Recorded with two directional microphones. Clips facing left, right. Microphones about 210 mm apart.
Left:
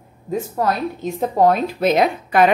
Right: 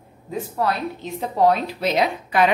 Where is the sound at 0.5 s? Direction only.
45° left (ahead or behind).